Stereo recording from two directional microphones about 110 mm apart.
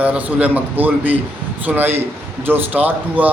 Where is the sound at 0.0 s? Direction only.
10° right (ahead or behind).